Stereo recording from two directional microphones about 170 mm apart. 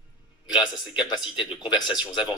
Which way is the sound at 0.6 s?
25° left (ahead or behind).